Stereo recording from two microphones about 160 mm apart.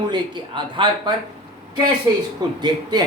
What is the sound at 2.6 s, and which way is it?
Speech, 25° right (ahead or behind).